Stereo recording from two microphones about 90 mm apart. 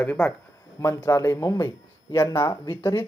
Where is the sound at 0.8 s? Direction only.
30° left (ahead or behind).